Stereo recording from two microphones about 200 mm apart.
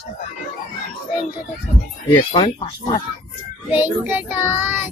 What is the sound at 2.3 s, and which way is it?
Speech, 25° left (ahead or behind).